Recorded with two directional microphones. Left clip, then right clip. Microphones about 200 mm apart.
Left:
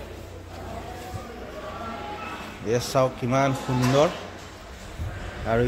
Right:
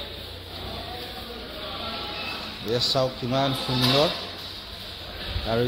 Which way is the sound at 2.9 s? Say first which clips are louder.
Left 2 dB; 15° left (ahead or behind).